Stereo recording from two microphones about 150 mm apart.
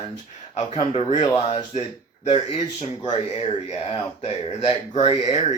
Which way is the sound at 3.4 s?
45° left (ahead or behind).